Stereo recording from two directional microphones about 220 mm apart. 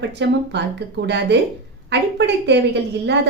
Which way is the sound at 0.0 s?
50° right (ahead or behind).